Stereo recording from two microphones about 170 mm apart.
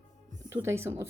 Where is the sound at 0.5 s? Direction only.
15° right (ahead or behind).